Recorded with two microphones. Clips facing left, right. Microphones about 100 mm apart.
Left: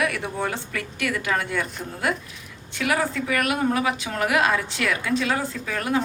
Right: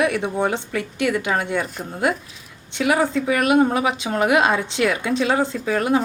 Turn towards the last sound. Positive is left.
turn(degrees=-30)  # may be behind; listen again after turning